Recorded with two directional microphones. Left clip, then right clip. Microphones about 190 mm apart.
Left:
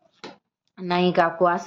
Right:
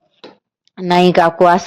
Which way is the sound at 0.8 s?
40° right (ahead or behind).